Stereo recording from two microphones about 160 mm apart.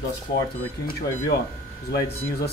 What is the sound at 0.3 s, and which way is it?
Speech, 25° left (ahead or behind).